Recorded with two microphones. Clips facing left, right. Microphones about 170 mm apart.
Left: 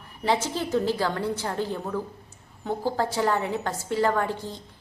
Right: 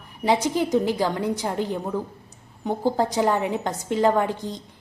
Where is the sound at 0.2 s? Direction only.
15° right (ahead or behind).